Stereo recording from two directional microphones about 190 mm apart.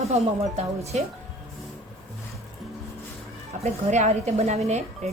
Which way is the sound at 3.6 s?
35° right (ahead or behind).